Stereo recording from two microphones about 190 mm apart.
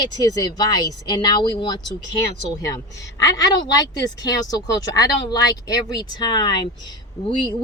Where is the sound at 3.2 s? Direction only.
20° left (ahead or behind).